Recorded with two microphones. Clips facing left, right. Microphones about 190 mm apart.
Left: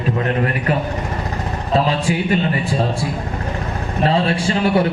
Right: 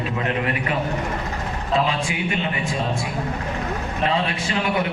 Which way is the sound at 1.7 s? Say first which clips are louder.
Left 5 dB; 40° left (ahead or behind).